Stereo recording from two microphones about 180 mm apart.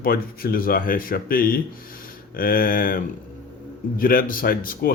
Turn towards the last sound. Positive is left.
turn(degrees=55)  # may be behind; listen again after turning